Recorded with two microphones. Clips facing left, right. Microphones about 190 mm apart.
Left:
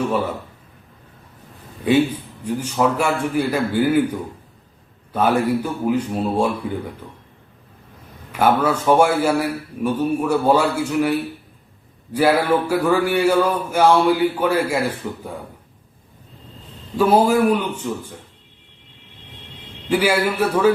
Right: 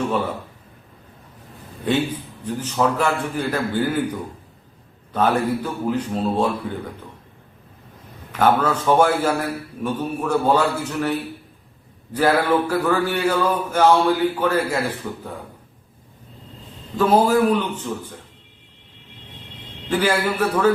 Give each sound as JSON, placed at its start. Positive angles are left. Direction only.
{"t": 1.8, "sound": "speech", "side_deg": 10}
{"t": 8.3, "sound": "speech", "side_deg": 10}
{"t": 17.0, "sound": "speech", "side_deg": 10}
{"t": 19.9, "sound": "speech", "side_deg": 10}